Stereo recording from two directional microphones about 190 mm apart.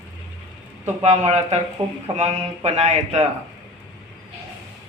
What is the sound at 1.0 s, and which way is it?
Speech, 35° right (ahead or behind).